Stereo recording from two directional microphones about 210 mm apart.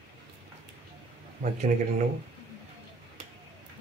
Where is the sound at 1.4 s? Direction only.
35° right (ahead or behind).